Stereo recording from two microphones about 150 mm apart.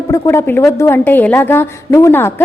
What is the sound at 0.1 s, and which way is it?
A woman's voice, 15° left (ahead or behind).